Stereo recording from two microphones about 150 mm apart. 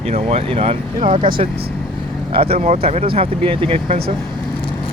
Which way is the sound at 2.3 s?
40° right (ahead or behind).